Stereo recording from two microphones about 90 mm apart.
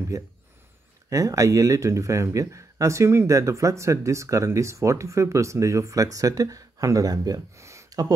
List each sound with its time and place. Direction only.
0.1 s speech: 35° right (ahead or behind)